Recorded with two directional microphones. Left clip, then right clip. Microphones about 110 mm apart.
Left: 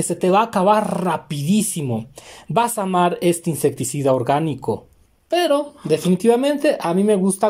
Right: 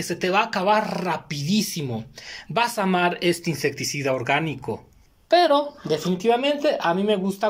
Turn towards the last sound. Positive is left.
turn(degrees=50)  # may be behind; listen again after turning